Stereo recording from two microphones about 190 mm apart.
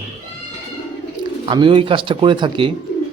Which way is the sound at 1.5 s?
25° right (ahead or behind).